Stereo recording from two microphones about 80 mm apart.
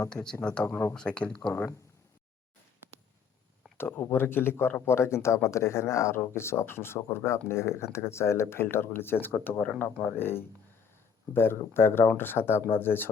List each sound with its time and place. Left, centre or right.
0.2 s speech: left
0.9 s speech: centre
3.8 s speech: left